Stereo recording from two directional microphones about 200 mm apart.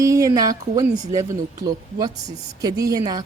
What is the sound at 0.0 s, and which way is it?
A woman's voice, 15° right (ahead or behind).